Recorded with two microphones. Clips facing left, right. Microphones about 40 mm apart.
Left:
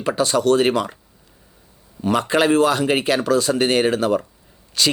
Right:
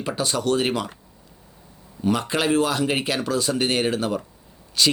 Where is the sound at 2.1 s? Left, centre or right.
Centre.